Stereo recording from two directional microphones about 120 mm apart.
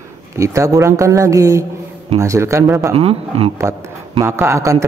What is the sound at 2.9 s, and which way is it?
Speech, 55° right (ahead or behind).